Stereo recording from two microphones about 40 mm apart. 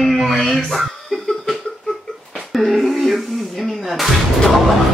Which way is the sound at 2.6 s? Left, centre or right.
Centre.